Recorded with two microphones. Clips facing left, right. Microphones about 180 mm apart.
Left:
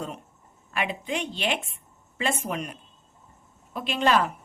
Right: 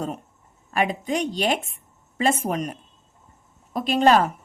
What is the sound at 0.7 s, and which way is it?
A woman's voice, 40° right (ahead or behind).